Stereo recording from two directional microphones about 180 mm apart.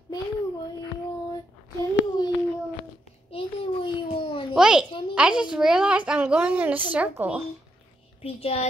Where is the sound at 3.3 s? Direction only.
30° left (ahead or behind).